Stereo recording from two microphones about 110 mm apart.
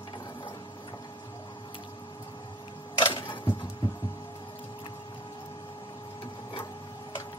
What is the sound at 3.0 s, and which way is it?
Single-lens reflex camera, 45° left (ahead or behind).